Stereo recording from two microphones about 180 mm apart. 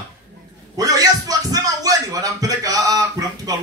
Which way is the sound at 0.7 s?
20° right (ahead or behind).